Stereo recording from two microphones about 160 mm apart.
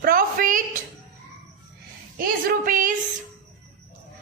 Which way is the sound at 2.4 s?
55° right (ahead or behind).